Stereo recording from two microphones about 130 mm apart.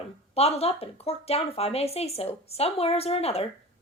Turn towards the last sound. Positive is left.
turn(degrees=50)  # may be behind; listen again after turning